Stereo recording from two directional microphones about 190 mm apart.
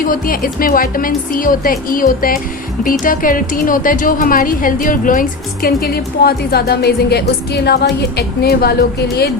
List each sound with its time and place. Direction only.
0.0 s a woman's voice: 50° left (ahead or behind)